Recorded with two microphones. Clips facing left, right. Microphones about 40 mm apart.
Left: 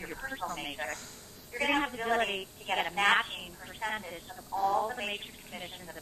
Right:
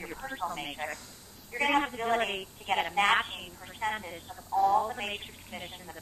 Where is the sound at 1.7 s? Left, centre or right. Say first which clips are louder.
Right 2 dB; centre.